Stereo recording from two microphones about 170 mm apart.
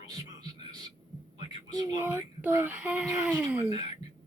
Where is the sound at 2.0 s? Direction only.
10° right (ahead or behind).